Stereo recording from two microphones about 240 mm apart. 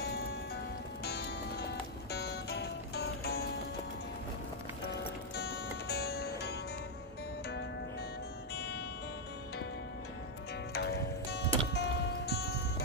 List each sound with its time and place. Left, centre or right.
1.0 s music: left
4.9 s music: left
8.5 s music: left
10.7 s music: left